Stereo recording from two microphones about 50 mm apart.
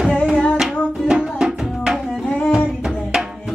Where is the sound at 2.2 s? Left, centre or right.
Left.